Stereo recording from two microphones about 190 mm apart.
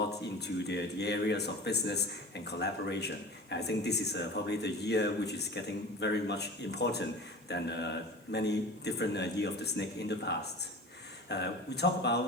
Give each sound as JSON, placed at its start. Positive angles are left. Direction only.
{"t": 0.3, "sound": "speech", "side_deg": 60}